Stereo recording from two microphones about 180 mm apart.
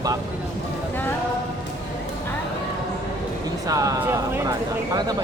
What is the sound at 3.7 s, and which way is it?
Speech, 20° right (ahead or behind).